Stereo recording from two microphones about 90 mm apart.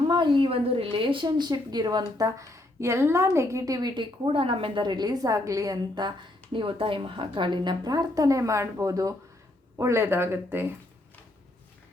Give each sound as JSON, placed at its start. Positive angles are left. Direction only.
{"t": 0.1, "sound": "a woman's voice", "side_deg": -65}
{"t": 3.9, "sound": "a woman's voice", "side_deg": -85}
{"t": 5.7, "sound": "a woman's voice", "side_deg": -55}